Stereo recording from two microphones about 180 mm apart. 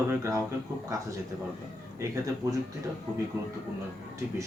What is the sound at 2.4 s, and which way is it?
Speech, 20° right (ahead or behind).